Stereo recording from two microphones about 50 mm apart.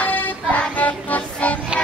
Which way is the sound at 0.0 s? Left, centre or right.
Left.